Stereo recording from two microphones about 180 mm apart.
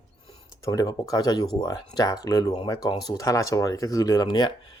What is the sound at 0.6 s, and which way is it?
Speech, 20° left (ahead or behind).